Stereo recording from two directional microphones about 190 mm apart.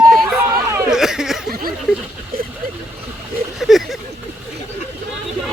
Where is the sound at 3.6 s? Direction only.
Centre (ahead or behind).